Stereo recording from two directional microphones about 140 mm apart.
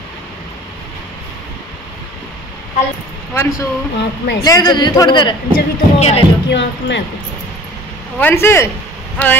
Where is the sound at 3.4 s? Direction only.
25° left (ahead or behind).